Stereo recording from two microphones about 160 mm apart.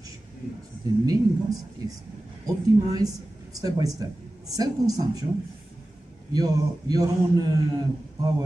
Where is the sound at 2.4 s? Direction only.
25° right (ahead or behind).